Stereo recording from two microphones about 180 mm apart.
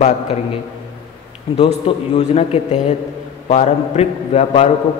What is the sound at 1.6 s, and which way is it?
A man's voice, 35° left (ahead or behind).